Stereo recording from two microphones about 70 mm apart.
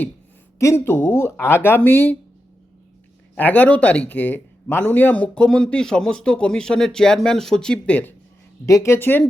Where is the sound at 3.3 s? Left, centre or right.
Left.